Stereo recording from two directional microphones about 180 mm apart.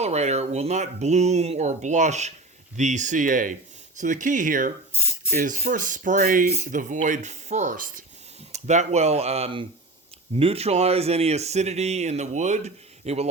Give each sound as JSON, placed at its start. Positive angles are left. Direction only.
{"t": 0.0, "sound": "speech", "side_deg": -35}